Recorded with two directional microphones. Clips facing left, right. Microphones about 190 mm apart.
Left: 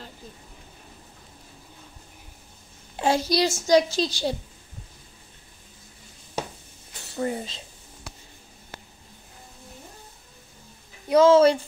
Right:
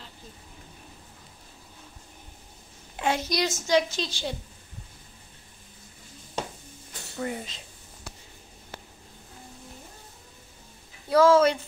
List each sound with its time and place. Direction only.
3.0 s a child's voice: 35° left (ahead or behind)
7.2 s speech: 30° left (ahead or behind)
11.1 s speech: 20° left (ahead or behind)